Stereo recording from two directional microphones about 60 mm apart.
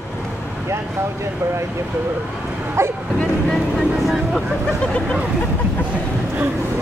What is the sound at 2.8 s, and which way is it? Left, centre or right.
Speech, right.